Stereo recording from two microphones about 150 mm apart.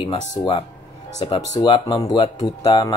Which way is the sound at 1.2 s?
30° left (ahead or behind).